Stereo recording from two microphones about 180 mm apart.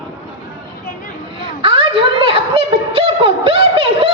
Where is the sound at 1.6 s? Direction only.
30° right (ahead or behind).